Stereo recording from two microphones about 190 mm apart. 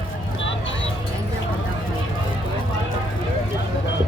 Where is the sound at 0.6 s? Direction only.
80° left.